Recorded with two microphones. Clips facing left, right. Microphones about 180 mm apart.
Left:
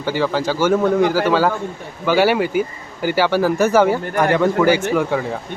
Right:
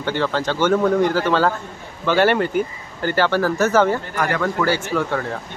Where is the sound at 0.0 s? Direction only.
10° left (ahead or behind).